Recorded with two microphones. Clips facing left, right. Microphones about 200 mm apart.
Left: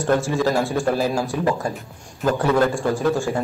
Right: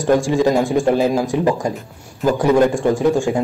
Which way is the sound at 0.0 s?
15° right (ahead or behind).